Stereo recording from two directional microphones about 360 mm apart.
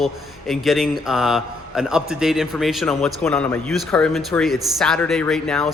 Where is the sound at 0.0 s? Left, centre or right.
Centre.